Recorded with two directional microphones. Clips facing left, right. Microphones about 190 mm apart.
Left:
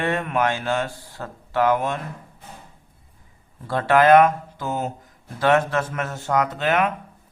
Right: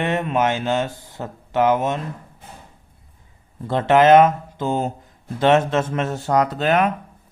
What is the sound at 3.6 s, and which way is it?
Speech, 20° right (ahead or behind).